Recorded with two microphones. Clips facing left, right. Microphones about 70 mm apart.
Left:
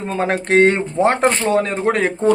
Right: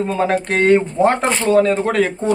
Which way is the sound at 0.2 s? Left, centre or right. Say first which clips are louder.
Left 4 dB; left.